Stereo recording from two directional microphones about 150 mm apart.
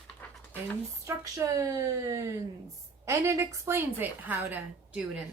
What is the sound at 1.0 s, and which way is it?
A woman's voice, 20° right (ahead or behind).